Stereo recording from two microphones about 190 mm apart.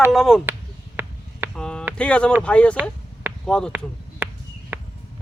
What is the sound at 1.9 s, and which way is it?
Speech, 5° left (ahead or behind).